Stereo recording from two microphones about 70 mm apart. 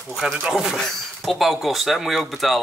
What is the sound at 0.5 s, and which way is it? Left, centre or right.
Speech, centre.